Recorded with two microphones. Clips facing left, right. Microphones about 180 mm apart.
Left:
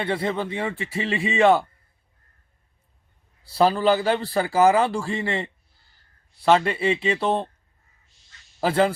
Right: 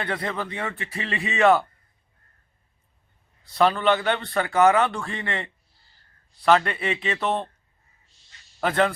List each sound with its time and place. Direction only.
0.0 s speech: 30° left (ahead or behind)
0.8 s speech: centre (ahead or behind)
3.4 s speech: 30° left (ahead or behind)
8.6 s speech: 30° left (ahead or behind)